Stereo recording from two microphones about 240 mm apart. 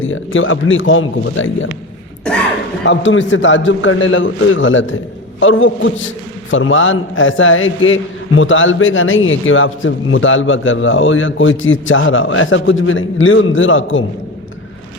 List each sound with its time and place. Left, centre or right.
0.0 s a man's voice: left
2.3 s speech: centre
2.8 s a man's voice: left